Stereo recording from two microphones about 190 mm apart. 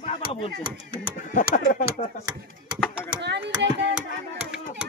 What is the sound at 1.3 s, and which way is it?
Speech, 45° left (ahead or behind).